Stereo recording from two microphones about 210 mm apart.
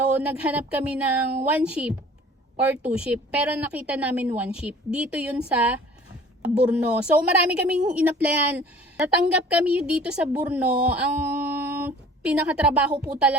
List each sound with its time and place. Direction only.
0.2 s a woman's voice: 5° right (ahead or behind)